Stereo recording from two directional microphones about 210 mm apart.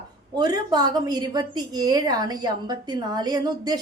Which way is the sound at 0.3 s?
20° right (ahead or behind).